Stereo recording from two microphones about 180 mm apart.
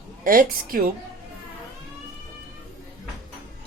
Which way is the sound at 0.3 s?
55° right (ahead or behind).